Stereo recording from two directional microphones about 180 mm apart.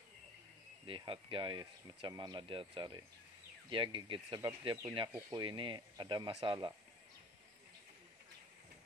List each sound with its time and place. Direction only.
0.8 s speech: 30° right (ahead or behind)